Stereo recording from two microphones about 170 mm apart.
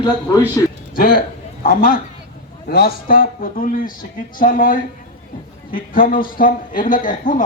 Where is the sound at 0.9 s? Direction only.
55° left (ahead or behind).